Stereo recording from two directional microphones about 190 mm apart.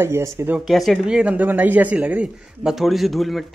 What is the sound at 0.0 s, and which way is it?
Speech, 15° right (ahead or behind).